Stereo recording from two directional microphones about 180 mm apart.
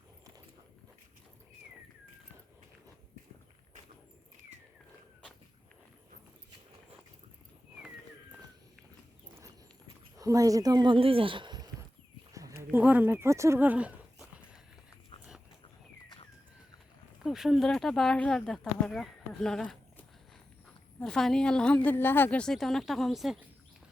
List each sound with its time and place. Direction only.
10.2 s speech: 20° right (ahead or behind)
12.3 s a sound: 20° right (ahead or behind)
17.2 s a woman's voice: centre (ahead or behind)